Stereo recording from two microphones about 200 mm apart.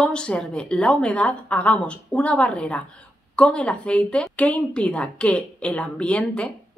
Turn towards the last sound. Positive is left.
turn(degrees=5)  # may be behind; listen again after turning